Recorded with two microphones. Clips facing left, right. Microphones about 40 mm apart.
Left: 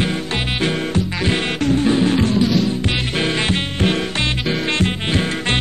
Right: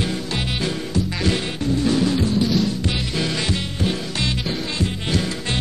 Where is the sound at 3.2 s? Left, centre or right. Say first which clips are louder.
Left 5 dB; left.